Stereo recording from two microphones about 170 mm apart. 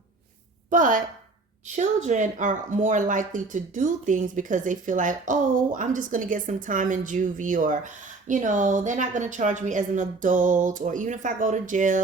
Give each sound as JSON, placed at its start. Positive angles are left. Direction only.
{"t": 0.7, "sound": "a woman's voice", "side_deg": -50}